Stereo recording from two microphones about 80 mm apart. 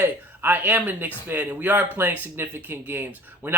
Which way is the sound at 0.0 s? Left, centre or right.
Right.